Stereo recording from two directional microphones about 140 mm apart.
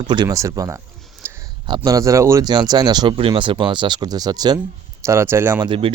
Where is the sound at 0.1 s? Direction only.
25° right (ahead or behind).